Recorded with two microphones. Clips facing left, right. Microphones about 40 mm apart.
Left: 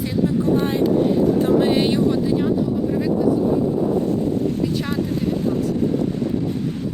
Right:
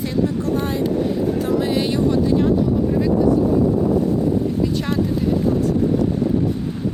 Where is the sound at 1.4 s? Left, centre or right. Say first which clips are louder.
Left 3 dB; left.